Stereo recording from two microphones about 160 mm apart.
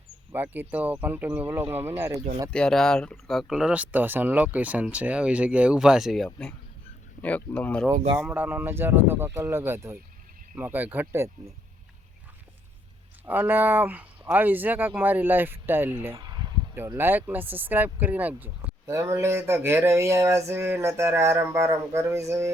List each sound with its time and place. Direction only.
0.3 s speech: 10° right (ahead or behind)
1.6 s speech: 40° right (ahead or behind)
1.9 s speech: 15° right (ahead or behind)
2.5 s speech: 5° left (ahead or behind)
8.2 s speech: 10° right (ahead or behind)
13.2 s speech: 10° right (ahead or behind)
16.1 s a sound: 25° right (ahead or behind)
16.7 s speech: 15° right (ahead or behind)